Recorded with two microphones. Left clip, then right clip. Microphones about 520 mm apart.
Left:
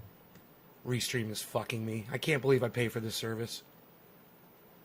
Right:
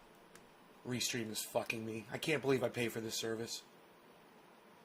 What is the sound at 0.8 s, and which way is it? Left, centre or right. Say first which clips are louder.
Speech: left 5 dB; left.